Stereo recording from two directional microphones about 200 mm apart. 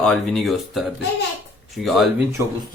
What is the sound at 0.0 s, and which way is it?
Speech, centre (ahead or behind).